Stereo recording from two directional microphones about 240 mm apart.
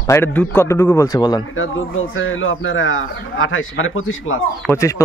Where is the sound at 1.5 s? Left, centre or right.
Left.